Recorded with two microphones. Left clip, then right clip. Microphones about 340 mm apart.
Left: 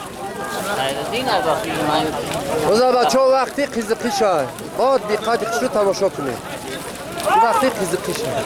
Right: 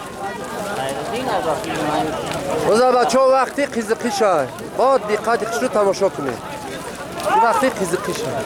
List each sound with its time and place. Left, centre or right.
0.7 s speech: centre